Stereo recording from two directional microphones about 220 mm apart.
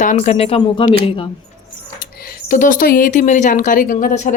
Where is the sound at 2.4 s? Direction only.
40° left (ahead or behind).